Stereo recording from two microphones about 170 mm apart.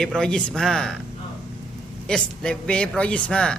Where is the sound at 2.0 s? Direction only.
5° left (ahead or behind).